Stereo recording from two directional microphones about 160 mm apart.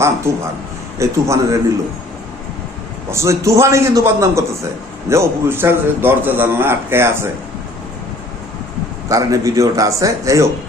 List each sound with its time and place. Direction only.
0.9 s a man's voice: 20° right (ahead or behind)
3.1 s a man's voice: 20° right (ahead or behind)
9.0 s a man's voice: 20° right (ahead or behind)